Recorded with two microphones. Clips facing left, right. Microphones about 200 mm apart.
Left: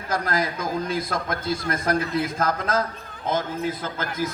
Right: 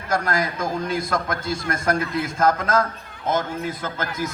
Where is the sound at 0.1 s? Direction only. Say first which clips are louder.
Right 2 dB; 50° right (ahead or behind).